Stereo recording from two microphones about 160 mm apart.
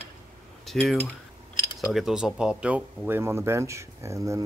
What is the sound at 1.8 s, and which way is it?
Speech, centre (ahead or behind).